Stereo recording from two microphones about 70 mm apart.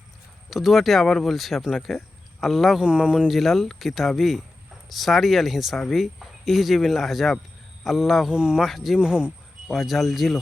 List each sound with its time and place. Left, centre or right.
0.5 s speech: centre
8.3 s speech: centre
9.0 s speech: centre
9.7 s speech: centre